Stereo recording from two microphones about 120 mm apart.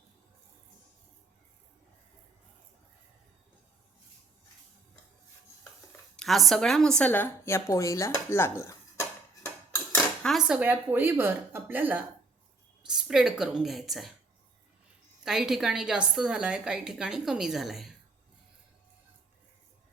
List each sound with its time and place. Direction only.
6.1 s a woman's voice: centre (ahead or behind); by 9.0 s 25° left (ahead or behind)
10.2 s a woman's voice: 5° right (ahead or behind)
12.8 s a woman's voice: 5° right (ahead or behind)
15.2 s a woman's voice: 5° right (ahead or behind)